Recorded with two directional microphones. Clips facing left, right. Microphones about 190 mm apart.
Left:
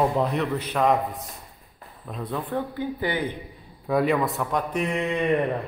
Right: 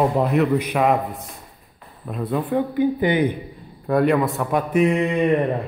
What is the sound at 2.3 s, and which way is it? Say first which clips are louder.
Speech: right 8 dB; 15° right (ahead or behind).